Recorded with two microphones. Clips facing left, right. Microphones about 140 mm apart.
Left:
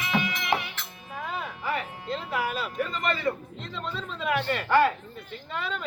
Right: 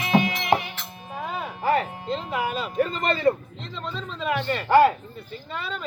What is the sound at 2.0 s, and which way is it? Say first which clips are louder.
Music: right 3 dB; 25° right (ahead or behind).